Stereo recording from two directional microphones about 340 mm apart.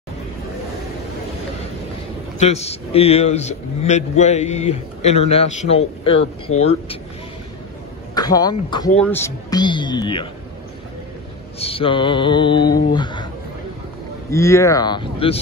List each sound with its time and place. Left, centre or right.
2.3 s a man's voice: centre
8.1 s speech: centre
11.6 s speech: centre
14.3 s speech: centre